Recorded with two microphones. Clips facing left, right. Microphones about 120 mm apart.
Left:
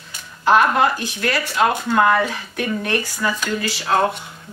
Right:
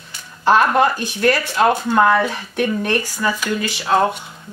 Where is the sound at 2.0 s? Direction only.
20° right (ahead or behind).